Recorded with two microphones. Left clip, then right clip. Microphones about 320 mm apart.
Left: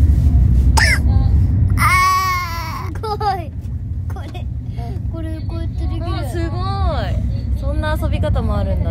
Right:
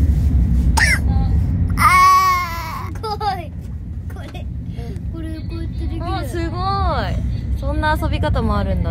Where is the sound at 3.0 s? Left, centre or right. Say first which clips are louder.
Left 2 dB; left.